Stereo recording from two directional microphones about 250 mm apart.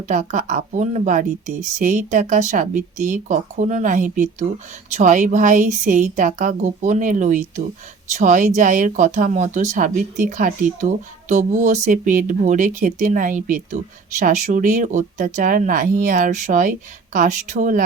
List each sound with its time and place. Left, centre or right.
0.0 s speech: right